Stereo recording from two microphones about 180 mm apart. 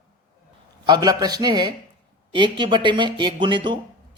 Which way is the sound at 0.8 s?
20° right (ahead or behind).